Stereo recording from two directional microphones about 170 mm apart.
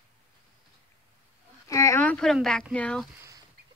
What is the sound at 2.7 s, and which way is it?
Speech, 5° left (ahead or behind).